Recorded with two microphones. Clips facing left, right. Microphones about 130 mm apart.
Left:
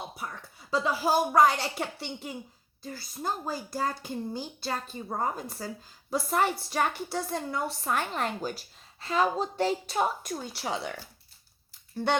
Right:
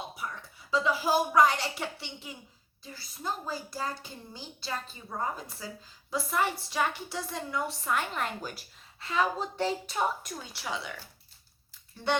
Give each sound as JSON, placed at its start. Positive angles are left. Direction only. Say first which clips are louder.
{"t": 0.7, "sound": "a woman's voice", "louder": "left 1 dB", "side_deg": 40}